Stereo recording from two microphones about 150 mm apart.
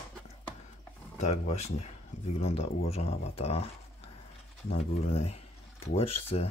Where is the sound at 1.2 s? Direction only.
50° left (ahead or behind).